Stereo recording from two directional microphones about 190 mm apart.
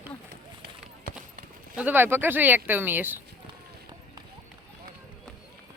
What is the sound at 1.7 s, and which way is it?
Speech, 10° right (ahead or behind).